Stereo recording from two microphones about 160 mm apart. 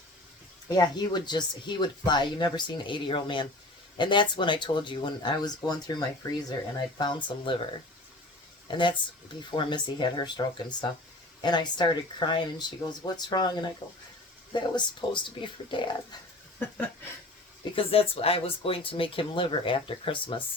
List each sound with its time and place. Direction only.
0.7 s speech: 25° left (ahead or behind)
8.6 s speech: 30° left (ahead or behind)
17.7 s speech: 35° left (ahead or behind)